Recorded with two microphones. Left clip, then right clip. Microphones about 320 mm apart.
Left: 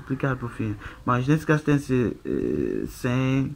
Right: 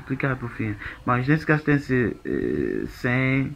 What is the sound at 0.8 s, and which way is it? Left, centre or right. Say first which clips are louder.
Speech: right 1 dB; centre.